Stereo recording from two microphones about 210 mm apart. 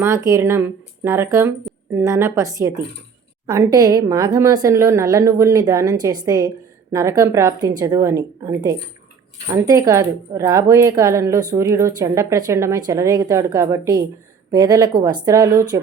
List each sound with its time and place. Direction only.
0.0 s a woman's voice: 15° right (ahead or behind)